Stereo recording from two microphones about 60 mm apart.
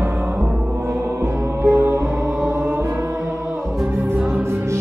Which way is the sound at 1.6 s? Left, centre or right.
Right.